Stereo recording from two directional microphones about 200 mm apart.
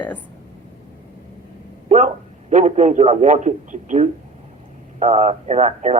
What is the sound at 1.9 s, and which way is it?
A man's voice, 40° right (ahead or behind).